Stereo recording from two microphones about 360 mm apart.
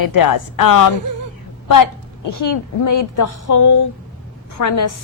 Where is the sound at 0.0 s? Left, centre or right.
Left.